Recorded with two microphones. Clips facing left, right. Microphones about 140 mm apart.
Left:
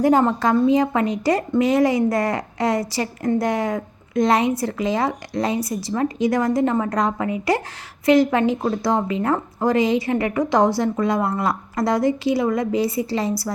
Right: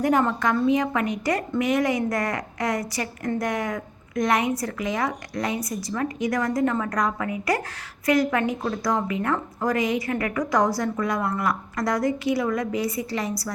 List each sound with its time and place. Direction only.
0.0 s a woman's voice: 30° left (ahead or behind)